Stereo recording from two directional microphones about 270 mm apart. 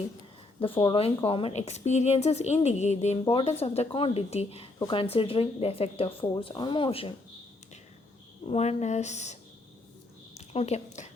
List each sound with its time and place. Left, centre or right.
0.6 s a woman's voice: centre
8.4 s a woman's voice: left
10.3 s a sound: left